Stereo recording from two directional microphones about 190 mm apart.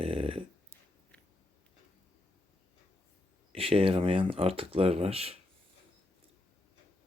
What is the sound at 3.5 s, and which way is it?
Speech, 30° right (ahead or behind).